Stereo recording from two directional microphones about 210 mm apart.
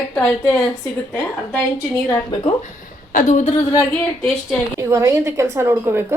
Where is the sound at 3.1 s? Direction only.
35° left (ahead or behind).